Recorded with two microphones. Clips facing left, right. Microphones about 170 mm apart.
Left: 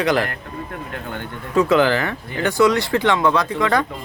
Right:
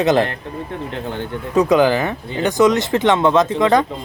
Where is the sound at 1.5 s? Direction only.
15° right (ahead or behind).